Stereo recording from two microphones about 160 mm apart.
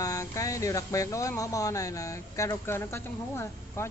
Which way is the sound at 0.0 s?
20° left (ahead or behind).